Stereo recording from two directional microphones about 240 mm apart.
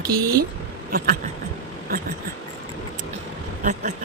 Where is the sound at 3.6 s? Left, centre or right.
Right.